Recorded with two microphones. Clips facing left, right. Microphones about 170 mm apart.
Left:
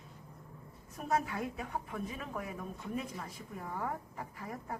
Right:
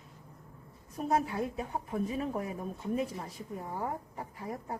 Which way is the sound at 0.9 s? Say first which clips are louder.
Right 4 dB; 30° right (ahead or behind).